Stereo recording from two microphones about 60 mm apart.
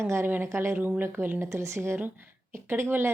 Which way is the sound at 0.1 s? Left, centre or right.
Right.